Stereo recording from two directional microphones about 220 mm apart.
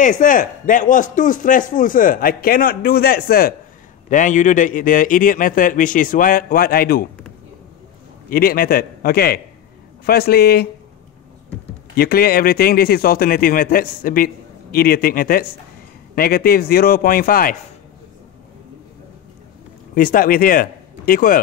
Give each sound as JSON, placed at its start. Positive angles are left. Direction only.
{"t": 0.0, "sound": "a man's voice", "side_deg": 35}
{"t": 8.3, "sound": "a man's voice", "side_deg": 40}
{"t": 11.9, "sound": "a man's voice", "side_deg": 45}
{"t": 19.9, "sound": "speech", "side_deg": 40}